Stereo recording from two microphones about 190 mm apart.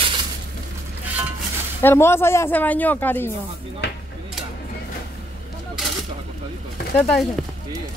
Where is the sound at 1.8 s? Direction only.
10° left (ahead or behind).